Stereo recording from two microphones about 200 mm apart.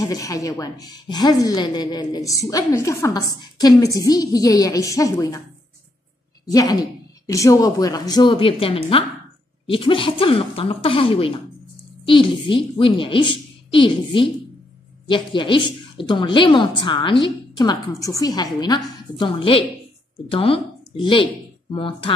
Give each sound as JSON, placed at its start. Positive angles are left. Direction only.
{"t": 0.0, "sound": "a woman's voice", "side_deg": 15}
{"t": 6.5, "sound": "a woman's voice", "side_deg": 20}